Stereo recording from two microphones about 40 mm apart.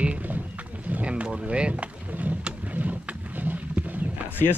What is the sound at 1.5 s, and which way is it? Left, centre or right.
Speech, right.